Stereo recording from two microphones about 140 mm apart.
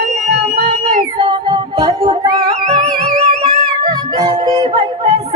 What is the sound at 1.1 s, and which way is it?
Music, 40° right (ahead or behind).